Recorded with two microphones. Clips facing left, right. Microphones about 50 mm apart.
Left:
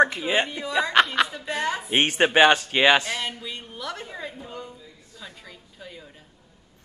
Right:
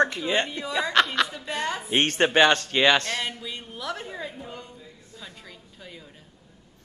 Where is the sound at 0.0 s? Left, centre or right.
Centre.